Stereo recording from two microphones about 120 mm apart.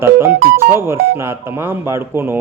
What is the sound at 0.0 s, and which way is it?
A man's voice, 20° right (ahead or behind).